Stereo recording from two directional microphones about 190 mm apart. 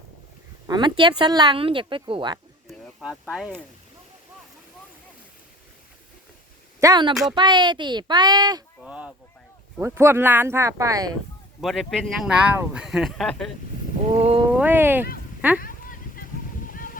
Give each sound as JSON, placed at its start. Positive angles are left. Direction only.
{"t": 0.7, "sound": "speech", "side_deg": -25}
{"t": 2.6, "sound": "speech", "side_deg": -5}
{"t": 6.7, "sound": "speech", "side_deg": -20}
{"t": 8.8, "sound": "speech", "side_deg": -5}
{"t": 11.6, "sound": "speech", "side_deg": 0}
{"t": 14.1, "sound": "a sound", "side_deg": -30}
{"t": 14.5, "sound": "speech", "side_deg": -10}
{"t": 15.6, "sound": "a sound", "side_deg": 50}